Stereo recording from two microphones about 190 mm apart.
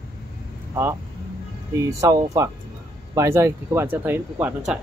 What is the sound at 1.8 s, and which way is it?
Speech, 15° right (ahead or behind).